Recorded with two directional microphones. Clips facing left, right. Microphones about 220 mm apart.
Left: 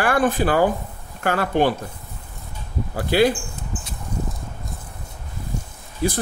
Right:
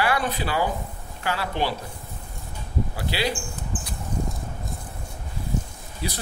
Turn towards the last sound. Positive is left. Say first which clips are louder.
# left 9 dB
turn(degrees=50)  # may be behind; listen again after turning